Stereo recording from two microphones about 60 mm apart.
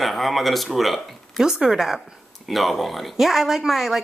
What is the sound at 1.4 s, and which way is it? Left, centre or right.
A woman's voice, centre.